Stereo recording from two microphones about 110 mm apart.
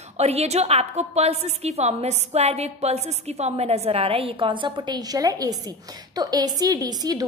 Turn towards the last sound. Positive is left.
turn(degrees=-35)  # may be behind; listen again after turning